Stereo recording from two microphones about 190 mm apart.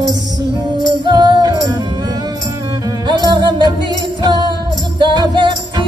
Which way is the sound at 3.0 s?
25° right (ahead or behind).